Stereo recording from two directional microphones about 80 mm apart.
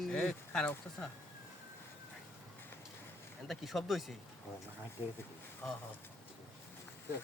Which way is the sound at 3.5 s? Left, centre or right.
Centre.